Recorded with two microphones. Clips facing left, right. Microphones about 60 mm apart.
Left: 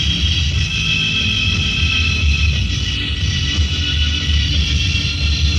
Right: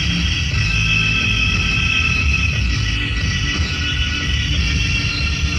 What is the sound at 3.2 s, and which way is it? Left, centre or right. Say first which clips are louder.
Music: right 1 dB; right.